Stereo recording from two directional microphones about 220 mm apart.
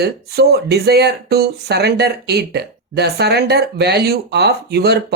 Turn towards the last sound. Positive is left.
turn(degrees=-50)  # may be behind; listen again after turning